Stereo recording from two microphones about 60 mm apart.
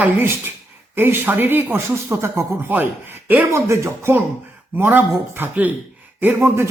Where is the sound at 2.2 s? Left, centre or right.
Right.